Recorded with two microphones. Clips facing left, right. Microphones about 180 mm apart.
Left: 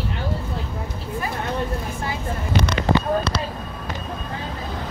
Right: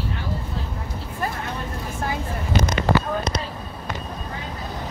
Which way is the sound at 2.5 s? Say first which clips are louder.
Even; 65° left (ahead or behind).